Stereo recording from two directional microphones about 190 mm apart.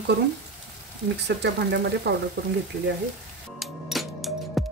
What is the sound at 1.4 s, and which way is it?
Speech, 65° right (ahead or behind).